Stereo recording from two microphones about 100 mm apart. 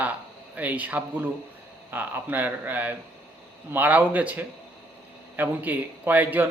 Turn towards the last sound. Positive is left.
turn(degrees=-20)  # may be behind; listen again after turning